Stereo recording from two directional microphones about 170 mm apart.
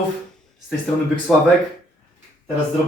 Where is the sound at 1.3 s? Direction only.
5° left (ahead or behind).